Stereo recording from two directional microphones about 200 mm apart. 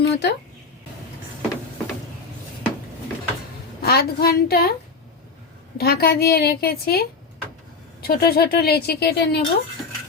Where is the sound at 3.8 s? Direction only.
50° left (ahead or behind).